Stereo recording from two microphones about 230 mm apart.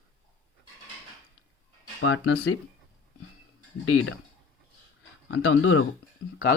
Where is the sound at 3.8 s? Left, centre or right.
Left.